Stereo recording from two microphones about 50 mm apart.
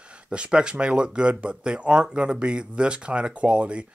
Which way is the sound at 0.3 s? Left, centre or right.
Right.